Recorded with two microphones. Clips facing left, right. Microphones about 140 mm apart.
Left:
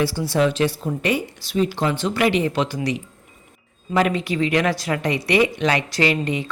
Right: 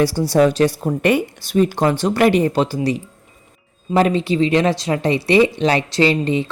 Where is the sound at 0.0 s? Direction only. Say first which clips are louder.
Right 5 dB; 40° right (ahead or behind).